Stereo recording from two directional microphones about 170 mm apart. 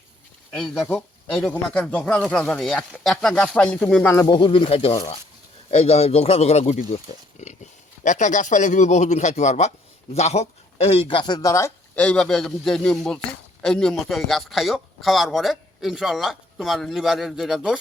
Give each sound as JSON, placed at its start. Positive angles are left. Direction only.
{"t": 0.5, "sound": "speech", "side_deg": 5}
{"t": 4.3, "sound": "speech", "side_deg": 30}